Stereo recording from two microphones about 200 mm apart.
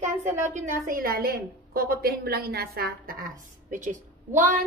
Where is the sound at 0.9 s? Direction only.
45° right (ahead or behind).